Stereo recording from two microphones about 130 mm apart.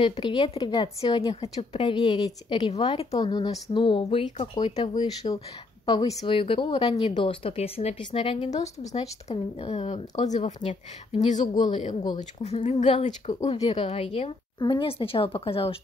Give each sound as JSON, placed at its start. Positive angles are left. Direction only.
{"t": 0.0, "sound": "a woman's voice", "side_deg": 35}
{"t": 1.3, "sound": "a woman's voice", "side_deg": 50}
{"t": 4.6, "sound": "a woman's voice", "side_deg": 30}
{"t": 8.4, "sound": "speech", "side_deg": 60}
{"t": 10.2, "sound": "speech", "side_deg": 65}
{"t": 11.3, "sound": "a woman's voice", "side_deg": 35}
{"t": 12.6, "sound": "speech", "side_deg": 50}